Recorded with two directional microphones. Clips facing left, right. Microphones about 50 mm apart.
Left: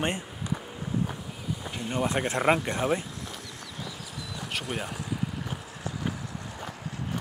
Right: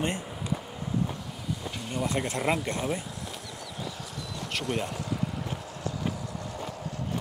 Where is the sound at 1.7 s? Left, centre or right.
Left.